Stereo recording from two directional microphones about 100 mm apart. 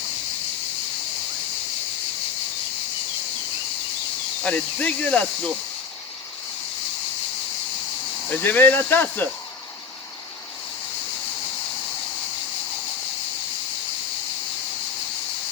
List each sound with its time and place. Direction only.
4.4 s speech: 15° left (ahead or behind)
8.3 s speech: 20° left (ahead or behind)